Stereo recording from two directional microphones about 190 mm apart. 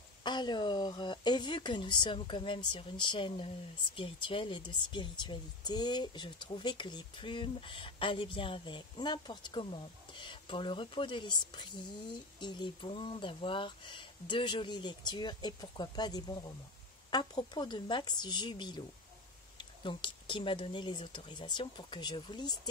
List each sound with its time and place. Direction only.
0.2 s speech: 25° left (ahead or behind)